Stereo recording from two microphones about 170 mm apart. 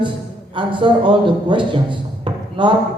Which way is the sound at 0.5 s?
30° right (ahead or behind).